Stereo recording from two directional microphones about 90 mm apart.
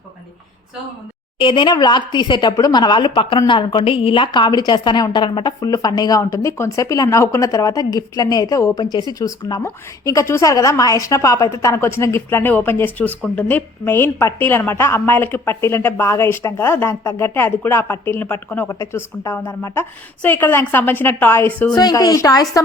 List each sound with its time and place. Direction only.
1.4 s a woman's voice: 65° left (ahead or behind); by 18.7 s 20° left (ahead or behind)
18.7 s a woman's voice: 35° left (ahead or behind)
21.8 s a woman's voice: 45° left (ahead or behind)